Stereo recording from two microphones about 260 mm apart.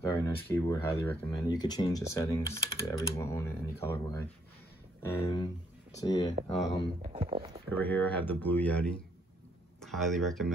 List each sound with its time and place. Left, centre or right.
0.0 s speech: centre
7.0 s speech: right
7.7 s speech: centre